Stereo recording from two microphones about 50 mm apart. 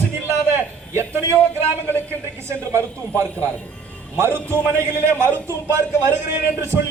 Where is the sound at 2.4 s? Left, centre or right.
Right.